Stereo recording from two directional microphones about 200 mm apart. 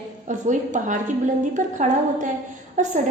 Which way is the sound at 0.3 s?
40° right (ahead or behind).